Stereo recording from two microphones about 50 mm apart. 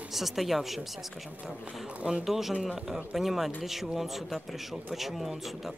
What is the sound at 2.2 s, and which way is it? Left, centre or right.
Speech, centre.